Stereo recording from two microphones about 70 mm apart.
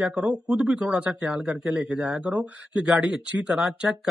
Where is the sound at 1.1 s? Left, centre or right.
Centre.